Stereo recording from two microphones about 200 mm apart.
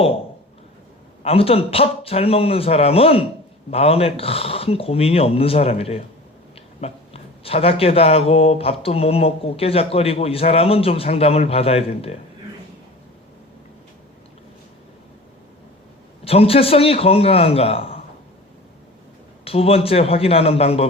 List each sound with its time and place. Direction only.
1.2 s speech: 30° left (ahead or behind)
16.2 s speech: 30° left (ahead or behind)
19.5 s speech: 30° left (ahead or behind)